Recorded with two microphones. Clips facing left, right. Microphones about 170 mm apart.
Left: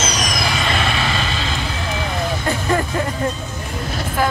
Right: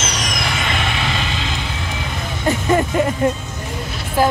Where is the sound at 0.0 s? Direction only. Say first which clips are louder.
Left 2 dB; 25° right (ahead or behind).